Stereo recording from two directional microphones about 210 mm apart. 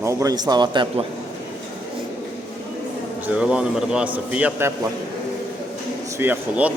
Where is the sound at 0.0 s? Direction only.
15° right (ahead or behind).